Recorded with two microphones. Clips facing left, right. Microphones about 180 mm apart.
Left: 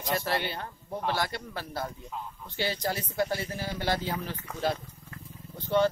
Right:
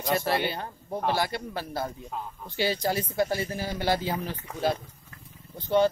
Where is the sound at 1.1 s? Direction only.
10° right (ahead or behind).